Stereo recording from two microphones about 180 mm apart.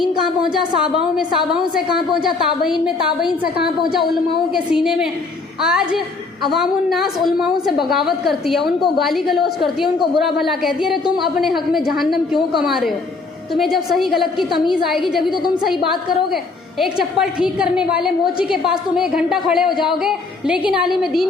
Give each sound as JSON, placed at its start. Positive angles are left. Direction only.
{"t": 0.6, "sound": "a woman's voice", "side_deg": -25}
{"t": 2.8, "sound": "a woman's voice", "side_deg": -5}
{"t": 4.5, "sound": "a woman's voice", "side_deg": 0}